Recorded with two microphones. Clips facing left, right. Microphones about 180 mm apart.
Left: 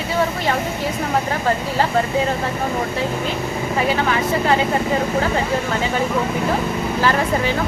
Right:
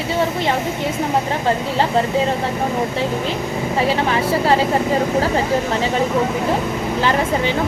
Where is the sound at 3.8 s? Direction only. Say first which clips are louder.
Right 1 dB; 30° right (ahead or behind).